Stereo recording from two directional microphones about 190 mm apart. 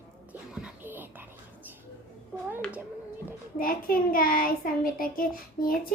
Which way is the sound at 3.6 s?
50° left (ahead or behind).